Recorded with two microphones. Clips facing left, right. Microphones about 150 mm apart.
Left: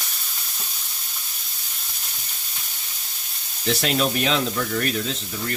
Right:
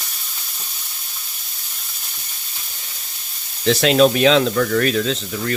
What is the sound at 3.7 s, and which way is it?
Speech, 90° right.